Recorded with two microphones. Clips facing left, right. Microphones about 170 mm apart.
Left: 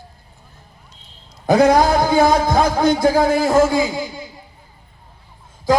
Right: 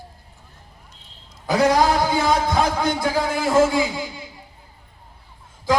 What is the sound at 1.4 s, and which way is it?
A man's voice, 50° left (ahead or behind).